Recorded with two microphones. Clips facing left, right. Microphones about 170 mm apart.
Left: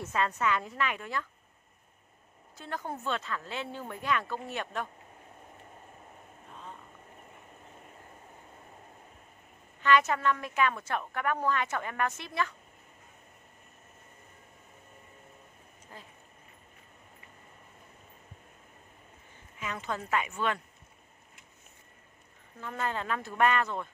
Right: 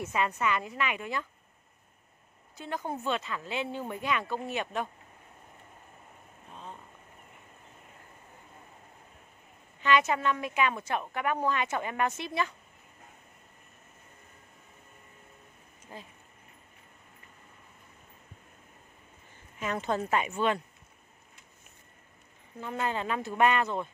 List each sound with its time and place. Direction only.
0.0 s a woman's voice: 10° right (ahead or behind)
2.5 s a woman's voice: 15° right (ahead or behind)
9.8 s a woman's voice: 15° right (ahead or behind)
19.8 s speech: 30° right (ahead or behind)
22.6 s a woman's voice: 15° right (ahead or behind)